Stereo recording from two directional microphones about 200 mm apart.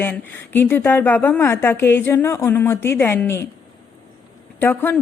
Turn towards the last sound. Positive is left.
turn(degrees=10)  # may be behind; listen again after turning